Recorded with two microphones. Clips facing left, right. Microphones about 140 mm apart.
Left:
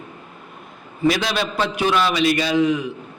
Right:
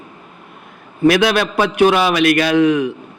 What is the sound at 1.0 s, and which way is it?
A man's voice, 65° right (ahead or behind).